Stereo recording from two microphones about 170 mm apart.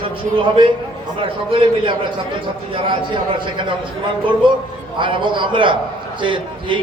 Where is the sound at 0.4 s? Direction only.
30° right (ahead or behind).